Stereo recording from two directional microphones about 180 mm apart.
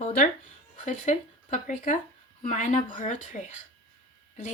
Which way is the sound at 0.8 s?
45° left (ahead or behind).